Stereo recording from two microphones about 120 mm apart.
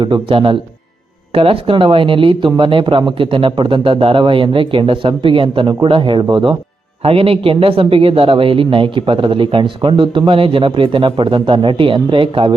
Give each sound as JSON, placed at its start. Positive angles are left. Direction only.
{"t": 0.0, "sound": "speech", "side_deg": -45}